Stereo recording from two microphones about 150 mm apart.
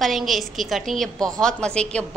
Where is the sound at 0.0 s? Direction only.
Centre (ahead or behind).